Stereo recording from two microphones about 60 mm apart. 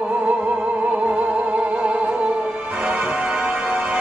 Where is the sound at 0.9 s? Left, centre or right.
Right.